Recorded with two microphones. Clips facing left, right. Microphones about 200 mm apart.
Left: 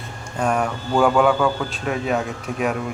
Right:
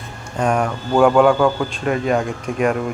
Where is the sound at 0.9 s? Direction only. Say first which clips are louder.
Right 4 dB; 5° right (ahead or behind).